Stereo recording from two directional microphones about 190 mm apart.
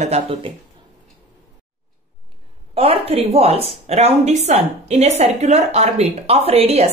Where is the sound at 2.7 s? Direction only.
30° right (ahead or behind).